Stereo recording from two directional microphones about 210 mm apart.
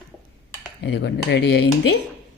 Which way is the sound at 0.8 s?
55° left (ahead or behind).